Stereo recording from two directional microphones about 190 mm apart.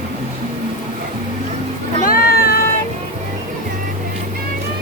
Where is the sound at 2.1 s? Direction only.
50° left (ahead or behind).